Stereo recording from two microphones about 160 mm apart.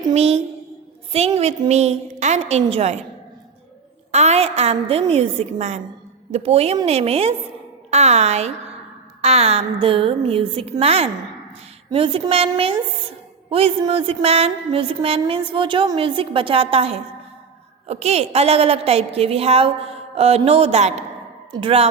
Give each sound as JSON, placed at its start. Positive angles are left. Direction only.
{"t": 0.1, "sound": "a woman's voice", "side_deg": -40}
{"t": 4.1, "sound": "a woman's voice", "side_deg": -45}